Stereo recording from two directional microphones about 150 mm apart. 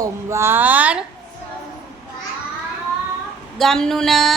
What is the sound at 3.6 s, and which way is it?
Speech, 5° left (ahead or behind).